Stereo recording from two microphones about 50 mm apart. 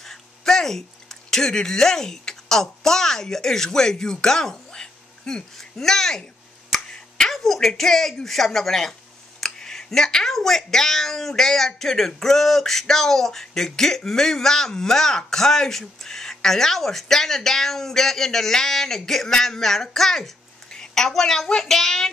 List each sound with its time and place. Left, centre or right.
0.0 s speech: centre
6.7 s finger snapping: centre
7.3 s speech: centre